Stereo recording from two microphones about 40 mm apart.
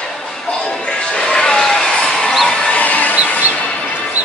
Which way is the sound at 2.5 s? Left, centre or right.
Left.